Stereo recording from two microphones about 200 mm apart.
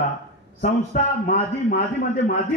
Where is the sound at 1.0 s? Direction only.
35° left (ahead or behind).